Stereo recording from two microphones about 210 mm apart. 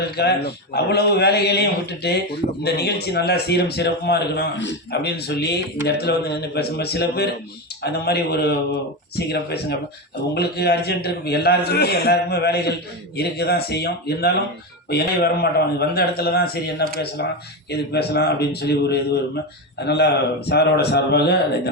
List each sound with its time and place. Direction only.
0.2 s a man's voice: 50° left (ahead or behind)